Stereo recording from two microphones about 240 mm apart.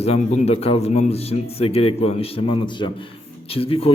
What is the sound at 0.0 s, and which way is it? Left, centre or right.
A man's voice, left.